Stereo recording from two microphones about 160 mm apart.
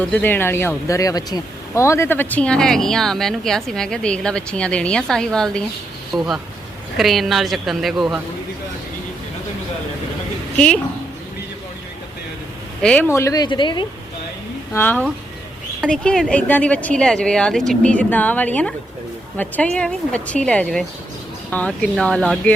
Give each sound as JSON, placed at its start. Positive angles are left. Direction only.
{"t": 0.0, "sound": "speech", "side_deg": 10}
{"t": 12.8, "sound": "speech", "side_deg": 10}
{"t": 14.7, "sound": "speech", "side_deg": 15}